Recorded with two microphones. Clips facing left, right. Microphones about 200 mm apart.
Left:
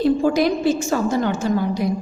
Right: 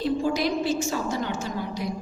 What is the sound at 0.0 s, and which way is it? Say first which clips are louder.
A woman's voice: left 7 dB; 55° left (ahead or behind).